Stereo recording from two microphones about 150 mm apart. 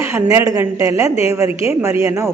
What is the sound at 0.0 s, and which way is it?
A woman's voice, 20° right (ahead or behind).